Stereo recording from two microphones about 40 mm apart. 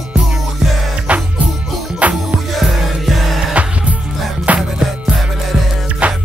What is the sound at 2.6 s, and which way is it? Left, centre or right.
Music, centre.